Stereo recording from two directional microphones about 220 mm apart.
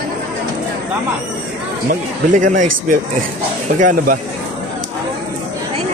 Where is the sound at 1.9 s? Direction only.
35° right (ahead or behind).